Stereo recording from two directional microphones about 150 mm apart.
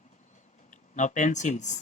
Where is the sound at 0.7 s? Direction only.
55° left (ahead or behind).